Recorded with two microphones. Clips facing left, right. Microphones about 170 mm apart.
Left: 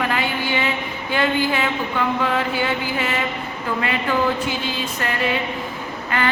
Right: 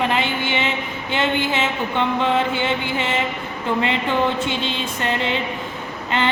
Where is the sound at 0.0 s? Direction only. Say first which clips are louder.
Right 1 dB; 25° right (ahead or behind).